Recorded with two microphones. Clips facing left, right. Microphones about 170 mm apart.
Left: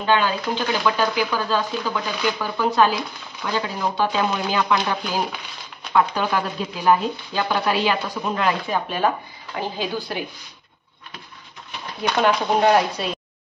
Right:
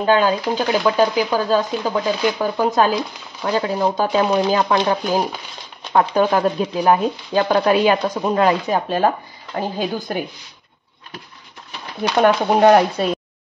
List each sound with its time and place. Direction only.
0.0 s speech: 40° right (ahead or behind)
12.0 s speech: 50° right (ahead or behind)